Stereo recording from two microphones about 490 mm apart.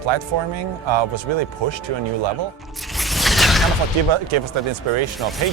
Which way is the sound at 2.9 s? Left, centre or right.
Centre.